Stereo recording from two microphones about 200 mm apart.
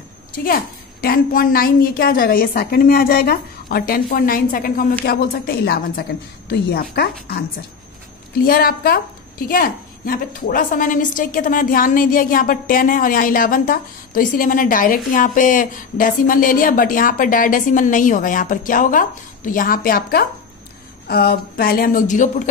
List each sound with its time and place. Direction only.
1.0 s a woman's voice: 45° left (ahead or behind)
8.5 s a woman's voice: 45° left (ahead or behind)